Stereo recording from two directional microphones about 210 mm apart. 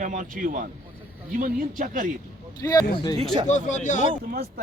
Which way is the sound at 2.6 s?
15° left (ahead or behind).